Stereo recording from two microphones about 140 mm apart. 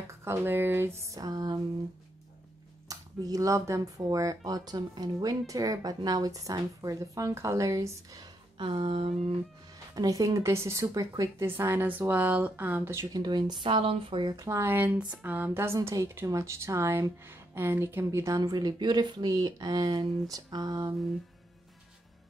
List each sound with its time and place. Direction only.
0.2 s speech: 15° right (ahead or behind)
2.9 s speech: 25° right (ahead or behind)
8.5 s speech: 40° right (ahead or behind)
9.9 s speech: 25° right (ahead or behind)
13.2 s speech: 30° right (ahead or behind)
14.3 s speech: 25° right (ahead or behind)